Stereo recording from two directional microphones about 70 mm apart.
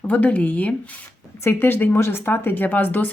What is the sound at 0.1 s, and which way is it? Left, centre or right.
Speech, left.